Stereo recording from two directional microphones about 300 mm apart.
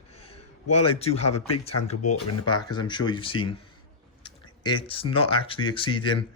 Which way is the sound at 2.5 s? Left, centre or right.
Centre.